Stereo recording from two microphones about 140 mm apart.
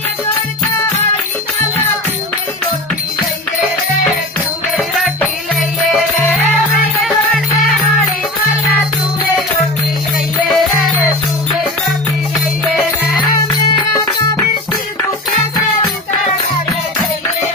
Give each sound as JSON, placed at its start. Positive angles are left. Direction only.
{"t": 4.7, "sound": "music", "side_deg": 0}
{"t": 7.0, "sound": "music", "side_deg": 0}
{"t": 10.5, "sound": "music", "side_deg": 0}
{"t": 12.7, "sound": "music", "side_deg": 0}
{"t": 13.2, "sound": "music", "side_deg": 30}